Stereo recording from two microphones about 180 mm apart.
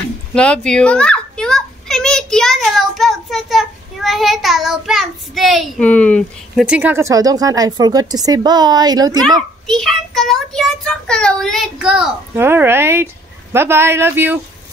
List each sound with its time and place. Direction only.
0.3 s children playing: 5° left (ahead or behind)
6.6 s speech: 10° right (ahead or behind)
9.7 s a child's voice: centre (ahead or behind)